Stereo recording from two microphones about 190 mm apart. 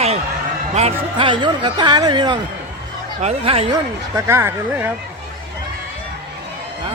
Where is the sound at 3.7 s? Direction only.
15° right (ahead or behind).